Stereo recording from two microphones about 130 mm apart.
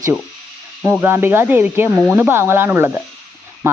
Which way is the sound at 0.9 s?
15° right (ahead or behind).